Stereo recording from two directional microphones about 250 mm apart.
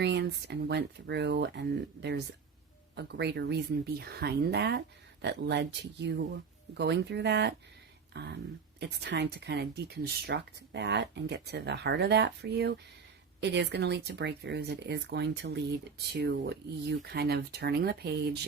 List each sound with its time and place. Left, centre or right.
0.0 s speech: right
8.1 s a sound: right
8.8 s speech: right